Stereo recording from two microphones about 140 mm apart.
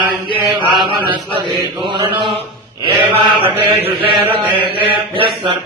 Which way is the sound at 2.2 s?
35° right (ahead or behind).